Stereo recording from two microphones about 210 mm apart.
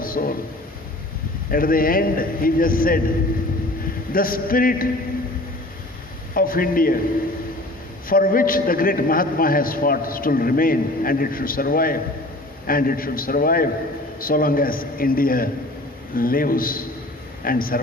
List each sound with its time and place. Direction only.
0.0 s a sound: 40° left (ahead or behind)
1.5 s a man's voice: 45° left (ahead or behind)
4.1 s a man's voice: 45° left (ahead or behind)
6.3 s a man's voice: 45° left (ahead or behind)
8.1 s a man's voice: 45° left (ahead or behind)